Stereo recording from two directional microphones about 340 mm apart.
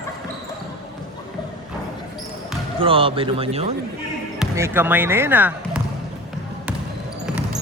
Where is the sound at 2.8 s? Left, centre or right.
Centre.